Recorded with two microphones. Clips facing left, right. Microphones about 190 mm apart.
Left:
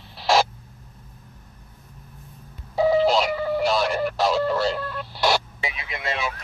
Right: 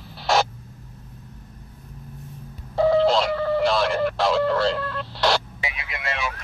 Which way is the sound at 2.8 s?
5° left (ahead or behind).